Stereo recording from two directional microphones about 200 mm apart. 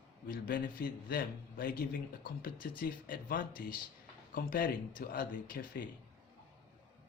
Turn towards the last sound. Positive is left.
turn(degrees=45)  # may be behind; listen again after turning